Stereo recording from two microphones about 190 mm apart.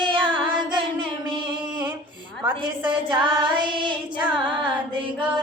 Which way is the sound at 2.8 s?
25° right (ahead or behind).